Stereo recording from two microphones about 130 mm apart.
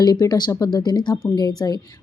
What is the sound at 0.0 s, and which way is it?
Speech, 30° left (ahead or behind).